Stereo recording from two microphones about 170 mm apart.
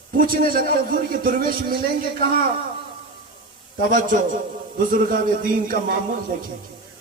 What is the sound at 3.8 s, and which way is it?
A man's voice, 50° right (ahead or behind).